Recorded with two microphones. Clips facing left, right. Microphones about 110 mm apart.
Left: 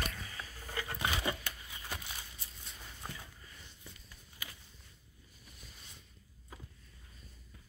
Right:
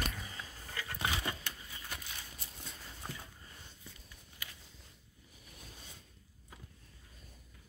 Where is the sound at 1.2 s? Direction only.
5° left (ahead or behind).